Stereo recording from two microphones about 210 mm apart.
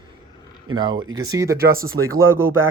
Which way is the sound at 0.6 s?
20° right (ahead or behind).